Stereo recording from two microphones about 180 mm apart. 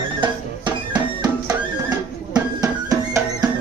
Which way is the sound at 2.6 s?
20° right (ahead or behind).